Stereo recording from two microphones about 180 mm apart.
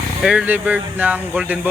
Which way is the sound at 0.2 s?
5° right (ahead or behind).